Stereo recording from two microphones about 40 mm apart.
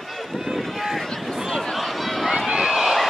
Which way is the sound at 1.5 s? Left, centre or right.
Centre.